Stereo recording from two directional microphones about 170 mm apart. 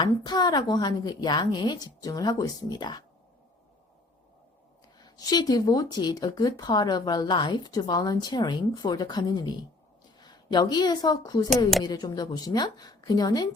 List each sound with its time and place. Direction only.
0.0 s speech: 25° left (ahead or behind)
4.9 s a woman's voice: 25° left (ahead or behind)